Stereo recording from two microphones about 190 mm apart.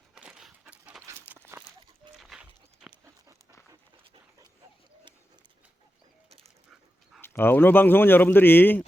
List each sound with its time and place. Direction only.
0.1 s a sound: 5° right (ahead or behind)
2.1 s horse: centre (ahead or behind)
3.7 s dog: 20° right (ahead or behind)
7.2 s speech: 10° left (ahead or behind)